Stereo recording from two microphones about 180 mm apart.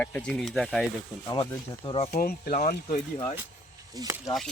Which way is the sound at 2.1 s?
55° left (ahead or behind).